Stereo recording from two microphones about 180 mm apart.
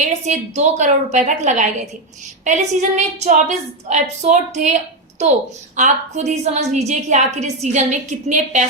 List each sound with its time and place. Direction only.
0.0 s a woman's voice: 40° right (ahead or behind)